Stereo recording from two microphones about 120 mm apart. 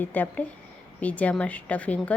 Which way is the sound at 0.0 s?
15° left (ahead or behind).